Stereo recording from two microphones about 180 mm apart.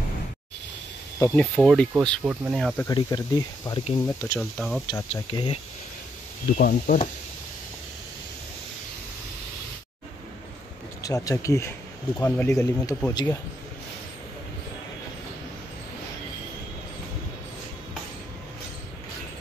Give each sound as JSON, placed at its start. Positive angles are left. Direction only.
{"t": 1.2, "sound": "speech", "side_deg": 5}
{"t": 2.9, "sound": "speech", "side_deg": 25}
{"t": 4.4, "sound": "speech", "side_deg": 0}
{"t": 4.8, "sound": "speech", "side_deg": 25}
{"t": 6.5, "sound": "speech", "side_deg": 45}
{"t": 11.0, "sound": "speech", "side_deg": 20}